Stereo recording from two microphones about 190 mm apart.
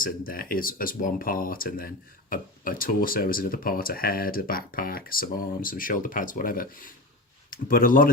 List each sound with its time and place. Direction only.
0.0 s speech: 50° left (ahead or behind)